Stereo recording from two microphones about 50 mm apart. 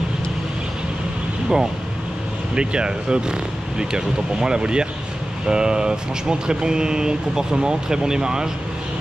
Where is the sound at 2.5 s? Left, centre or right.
Centre.